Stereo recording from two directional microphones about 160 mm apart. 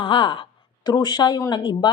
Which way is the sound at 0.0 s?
30° left (ahead or behind).